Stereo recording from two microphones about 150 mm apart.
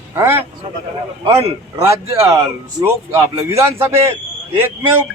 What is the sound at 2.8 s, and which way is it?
A man's voice, 20° right (ahead or behind).